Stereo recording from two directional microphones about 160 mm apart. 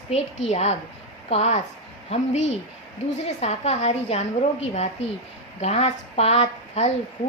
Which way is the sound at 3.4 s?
45° left (ahead or behind).